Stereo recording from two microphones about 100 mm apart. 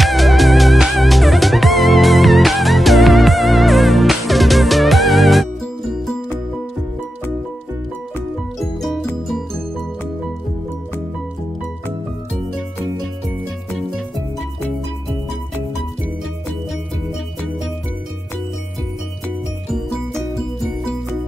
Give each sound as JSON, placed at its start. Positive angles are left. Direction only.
{"t": 0.0, "sound": "music", "side_deg": 0}
{"t": 8.5, "sound": "music", "side_deg": 0}
{"t": 13.7, "sound": "music", "side_deg": 0}